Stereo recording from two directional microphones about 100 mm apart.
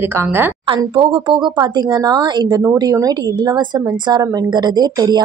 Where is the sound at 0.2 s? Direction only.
20° right (ahead or behind).